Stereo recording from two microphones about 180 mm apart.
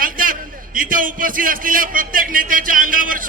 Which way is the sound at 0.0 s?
50° right (ahead or behind).